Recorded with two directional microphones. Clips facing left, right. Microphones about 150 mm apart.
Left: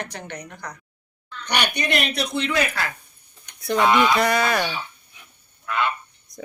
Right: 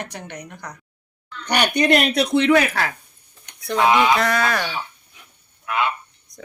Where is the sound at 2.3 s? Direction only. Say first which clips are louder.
Right 8 dB; 65° right (ahead or behind).